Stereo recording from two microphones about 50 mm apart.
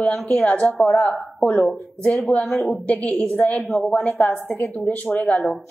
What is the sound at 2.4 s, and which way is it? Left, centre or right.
Speech, centre.